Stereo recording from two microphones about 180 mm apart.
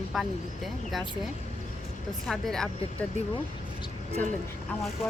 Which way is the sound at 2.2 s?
Centre (ahead or behind).